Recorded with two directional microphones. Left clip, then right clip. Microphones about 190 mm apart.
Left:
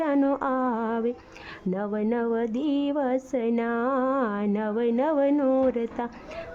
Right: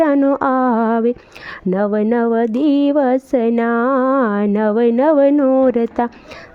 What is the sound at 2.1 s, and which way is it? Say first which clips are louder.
Female singing: right 10 dB; 35° right (ahead or behind).